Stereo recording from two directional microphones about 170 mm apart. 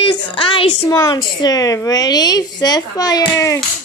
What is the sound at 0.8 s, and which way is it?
A woman's voice, 20° left (ahead or behind).